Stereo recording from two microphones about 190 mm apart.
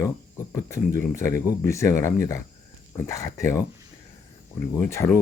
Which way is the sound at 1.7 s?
15° left (ahead or behind).